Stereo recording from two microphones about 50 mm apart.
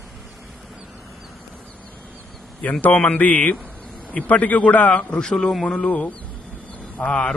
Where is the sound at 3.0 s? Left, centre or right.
Left.